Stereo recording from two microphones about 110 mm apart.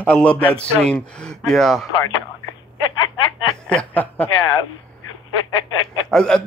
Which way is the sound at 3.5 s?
10° left (ahead or behind).